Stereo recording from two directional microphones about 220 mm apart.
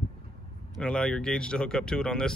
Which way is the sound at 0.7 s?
5° left (ahead or behind).